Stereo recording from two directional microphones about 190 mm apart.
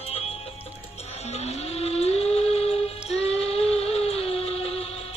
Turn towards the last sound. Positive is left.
turn(degrees=30)  # may be behind; listen again after turning